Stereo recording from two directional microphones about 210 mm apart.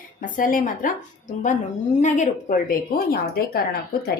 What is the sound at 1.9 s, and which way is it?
A woman's voice, 35° left (ahead or behind).